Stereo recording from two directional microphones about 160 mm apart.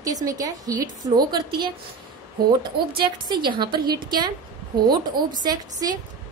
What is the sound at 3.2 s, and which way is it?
Speech, 30° right (ahead or behind).